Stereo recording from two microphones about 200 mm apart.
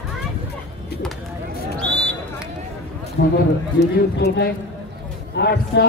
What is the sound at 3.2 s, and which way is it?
A man's voice, 60° left (ahead or behind).